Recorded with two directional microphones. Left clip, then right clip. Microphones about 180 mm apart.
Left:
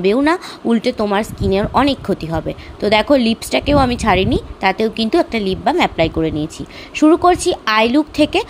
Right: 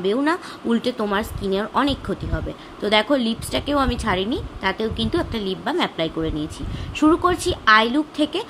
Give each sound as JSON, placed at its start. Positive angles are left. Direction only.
{"t": 0.0, "sound": "speech", "side_deg": 40}